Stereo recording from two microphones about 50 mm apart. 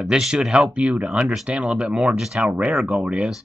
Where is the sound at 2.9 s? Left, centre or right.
Right.